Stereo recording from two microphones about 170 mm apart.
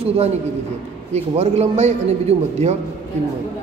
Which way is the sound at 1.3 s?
40° right (ahead or behind).